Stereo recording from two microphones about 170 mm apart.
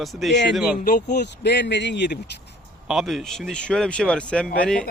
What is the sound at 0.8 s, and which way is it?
Speech, 70° left (ahead or behind).